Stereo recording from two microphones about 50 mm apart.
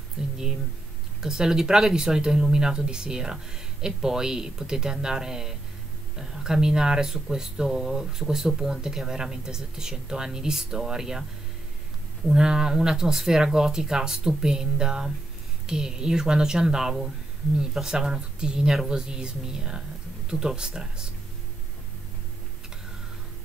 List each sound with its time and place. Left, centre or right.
0.2 s a sound: centre
1.2 s speech: centre
12.3 s speech: centre